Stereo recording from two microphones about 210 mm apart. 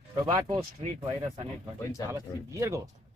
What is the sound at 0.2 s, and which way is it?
Speech, 25° right (ahead or behind).